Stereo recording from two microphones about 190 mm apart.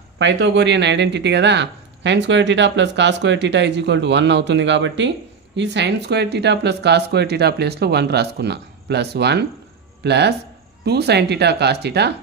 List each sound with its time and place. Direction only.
0.2 s speech: 65° right (ahead or behind)